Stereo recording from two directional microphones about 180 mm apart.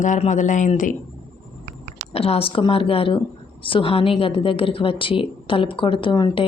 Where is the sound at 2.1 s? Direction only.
35° left (ahead or behind).